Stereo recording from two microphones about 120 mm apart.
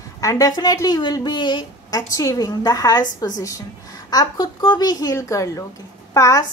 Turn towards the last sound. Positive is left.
turn(degrees=25)  # may be behind; listen again after turning